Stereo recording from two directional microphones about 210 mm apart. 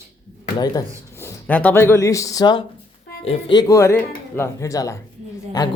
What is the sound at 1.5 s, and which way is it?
A man's voice, 5° left (ahead or behind).